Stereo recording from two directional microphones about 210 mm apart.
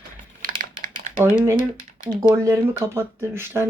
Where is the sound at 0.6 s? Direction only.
40° right (ahead or behind).